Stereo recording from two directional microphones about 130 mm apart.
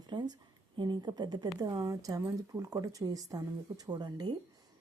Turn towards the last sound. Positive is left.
turn(degrees=-30)  # may be behind; listen again after turning